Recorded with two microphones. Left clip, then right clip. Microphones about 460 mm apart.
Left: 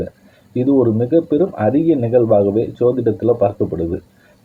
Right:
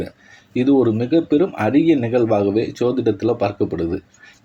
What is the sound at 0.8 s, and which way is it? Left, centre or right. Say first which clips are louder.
Speech: left 2 dB; left.